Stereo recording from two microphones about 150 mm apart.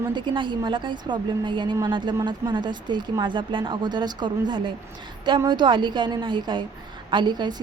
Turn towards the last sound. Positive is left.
turn(degrees=-30)  # may be behind; listen again after turning